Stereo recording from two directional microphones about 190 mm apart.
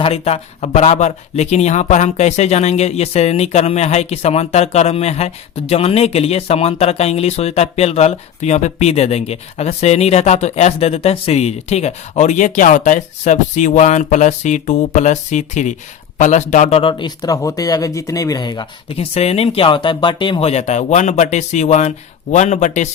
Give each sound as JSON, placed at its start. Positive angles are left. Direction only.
{"t": 0.0, "sound": "speech", "side_deg": 30}